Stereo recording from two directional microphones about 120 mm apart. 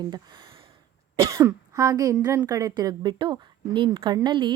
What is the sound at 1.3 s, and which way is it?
A woman's voice, 30° right (ahead or behind).